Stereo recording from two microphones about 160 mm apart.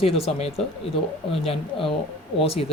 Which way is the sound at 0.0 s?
40° left (ahead or behind).